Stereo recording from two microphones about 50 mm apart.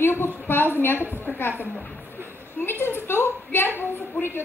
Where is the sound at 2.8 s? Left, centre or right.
Left.